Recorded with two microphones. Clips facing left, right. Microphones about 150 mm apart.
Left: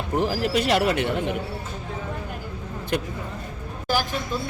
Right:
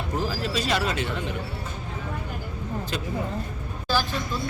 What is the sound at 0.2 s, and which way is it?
Speech, 65° left (ahead or behind).